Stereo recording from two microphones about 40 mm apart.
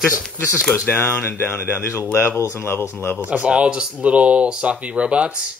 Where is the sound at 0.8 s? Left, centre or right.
Left.